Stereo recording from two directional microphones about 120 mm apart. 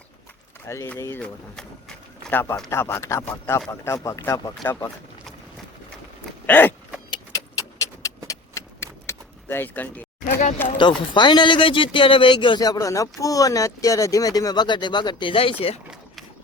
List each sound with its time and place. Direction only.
0.6 s speech: 25° left (ahead or behind)
1.2 s speech: 5° left (ahead or behind)
2.3 s speech: 20° left (ahead or behind)
6.5 s vehicle: 15° left (ahead or behind)
7.1 s vehicle: 30° left (ahead or behind)
10.8 s speech: 40° left (ahead or behind)
12.6 s speech: 30° left (ahead or behind); by 15.8 s 50° left (ahead or behind)